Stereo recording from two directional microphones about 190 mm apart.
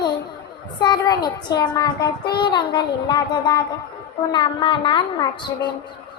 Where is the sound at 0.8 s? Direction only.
20° left (ahead or behind).